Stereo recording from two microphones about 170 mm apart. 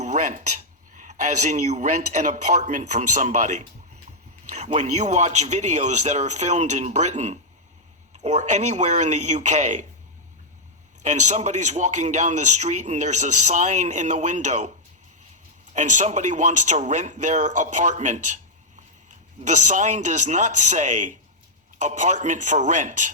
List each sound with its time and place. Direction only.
0.0 s a man's voice: 45° right (ahead or behind)
11.0 s a man's voice: 45° right (ahead or behind)
15.7 s a man's voice: 45° right (ahead or behind)
19.4 s a man's voice: 45° right (ahead or behind)